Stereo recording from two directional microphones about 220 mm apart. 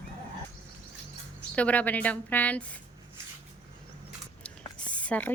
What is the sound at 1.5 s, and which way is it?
A woman's voice, 5° left (ahead or behind).